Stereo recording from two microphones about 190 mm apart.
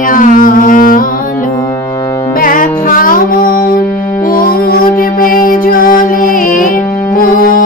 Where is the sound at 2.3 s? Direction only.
45° left (ahead or behind).